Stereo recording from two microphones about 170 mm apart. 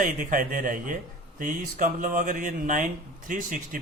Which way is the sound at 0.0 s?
50° right (ahead or behind).